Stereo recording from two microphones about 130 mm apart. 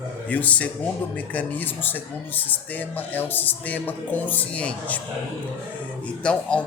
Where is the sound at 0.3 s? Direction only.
10° left (ahead or behind).